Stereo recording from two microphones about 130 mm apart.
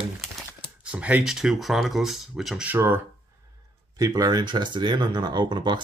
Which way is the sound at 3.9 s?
30° right (ahead or behind).